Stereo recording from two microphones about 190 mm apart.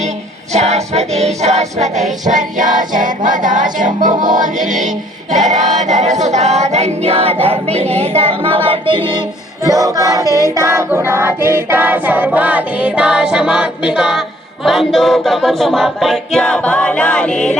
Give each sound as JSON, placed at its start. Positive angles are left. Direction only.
{"t": 0.5, "sound": "music", "side_deg": -35}
{"t": 5.3, "sound": "choir", "side_deg": -40}
{"t": 9.6, "sound": "choir", "side_deg": -20}